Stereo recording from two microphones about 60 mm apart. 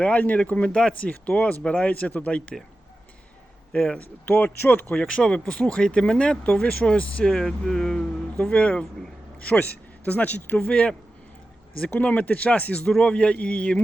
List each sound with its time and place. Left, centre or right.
0.0 s speech: left
3.7 s speech: centre
6.8 s speech: centre
8.4 s speech: left
12.9 s speech: centre